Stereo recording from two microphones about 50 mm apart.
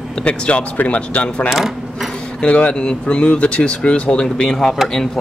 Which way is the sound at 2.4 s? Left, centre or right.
Left.